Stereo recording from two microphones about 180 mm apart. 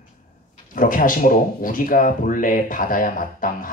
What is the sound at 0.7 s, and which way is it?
Speech, 50° left (ahead or behind).